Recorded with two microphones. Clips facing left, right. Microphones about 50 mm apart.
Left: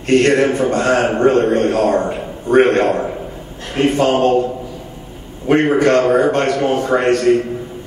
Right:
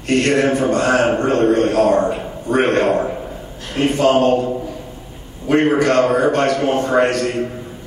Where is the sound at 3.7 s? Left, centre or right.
Left.